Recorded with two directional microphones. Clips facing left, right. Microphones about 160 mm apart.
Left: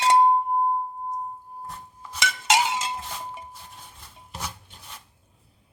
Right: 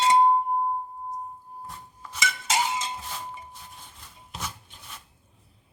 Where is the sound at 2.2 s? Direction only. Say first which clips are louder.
Left 5 dB; 85° left.